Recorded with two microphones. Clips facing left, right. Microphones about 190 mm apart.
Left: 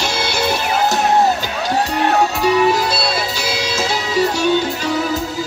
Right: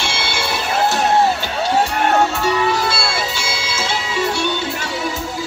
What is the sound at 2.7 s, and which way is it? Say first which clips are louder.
Music: left 2 dB; 40° left (ahead or behind).